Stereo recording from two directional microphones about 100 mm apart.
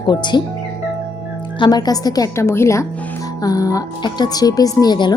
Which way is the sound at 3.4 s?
40° left (ahead or behind).